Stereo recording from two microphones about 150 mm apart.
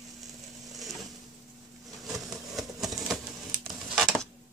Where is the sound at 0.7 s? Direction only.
Centre (ahead or behind).